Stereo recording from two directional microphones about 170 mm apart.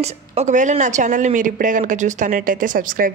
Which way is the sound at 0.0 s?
40° right (ahead or behind).